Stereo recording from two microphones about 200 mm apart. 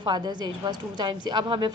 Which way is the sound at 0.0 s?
20° right (ahead or behind).